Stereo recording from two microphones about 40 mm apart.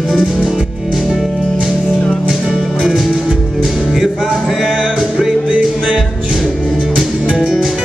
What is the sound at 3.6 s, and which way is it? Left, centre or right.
Music, centre.